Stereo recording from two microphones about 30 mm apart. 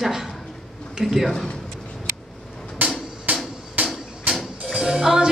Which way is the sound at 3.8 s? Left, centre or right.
Right.